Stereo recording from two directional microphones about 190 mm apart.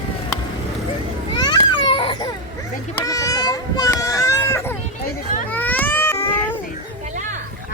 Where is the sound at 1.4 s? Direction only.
25° left (ahead or behind).